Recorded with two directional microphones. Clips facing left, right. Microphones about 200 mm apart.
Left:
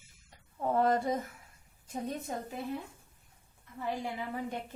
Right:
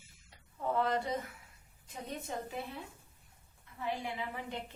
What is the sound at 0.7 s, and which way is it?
Speech, 45° left (ahead or behind).